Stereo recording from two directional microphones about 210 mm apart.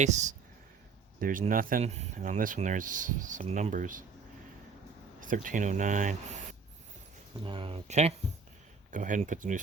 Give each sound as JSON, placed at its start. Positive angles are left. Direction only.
{"t": 0.0, "sound": "speech", "side_deg": -35}
{"t": 5.2, "sound": "speech", "side_deg": -40}
{"t": 7.4, "sound": "speech", "side_deg": -25}